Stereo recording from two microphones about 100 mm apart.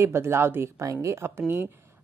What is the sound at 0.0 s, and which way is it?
A woman's voice, 25° right (ahead or behind).